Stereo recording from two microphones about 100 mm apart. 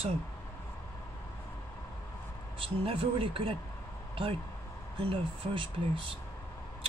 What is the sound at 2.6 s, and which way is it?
Speech, 70° right (ahead or behind).